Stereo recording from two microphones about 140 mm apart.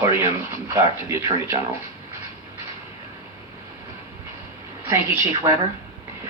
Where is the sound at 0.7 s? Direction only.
20° right (ahead or behind).